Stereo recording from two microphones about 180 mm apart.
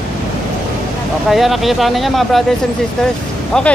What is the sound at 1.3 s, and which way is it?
Speech, centre (ahead or behind).